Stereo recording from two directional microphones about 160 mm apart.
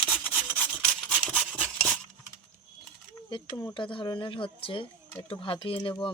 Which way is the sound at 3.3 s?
25° left (ahead or behind).